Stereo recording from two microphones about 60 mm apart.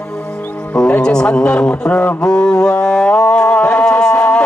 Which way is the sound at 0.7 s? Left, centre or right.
Centre.